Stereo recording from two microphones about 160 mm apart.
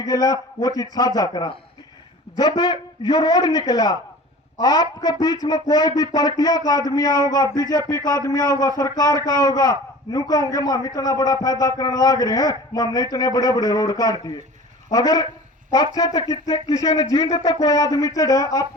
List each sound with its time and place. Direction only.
0.0 s a man's voice: 25° left (ahead or behind)